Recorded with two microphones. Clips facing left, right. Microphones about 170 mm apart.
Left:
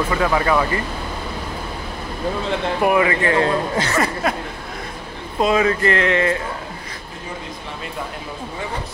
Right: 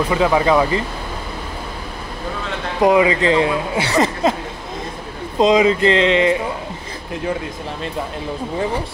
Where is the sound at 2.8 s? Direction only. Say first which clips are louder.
Right 5 dB; 20° right (ahead or behind).